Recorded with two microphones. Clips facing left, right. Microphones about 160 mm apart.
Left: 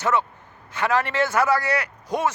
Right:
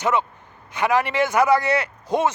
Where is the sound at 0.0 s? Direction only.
15° right (ahead or behind).